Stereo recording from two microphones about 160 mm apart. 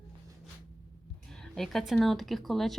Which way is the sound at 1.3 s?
5° left (ahead or behind).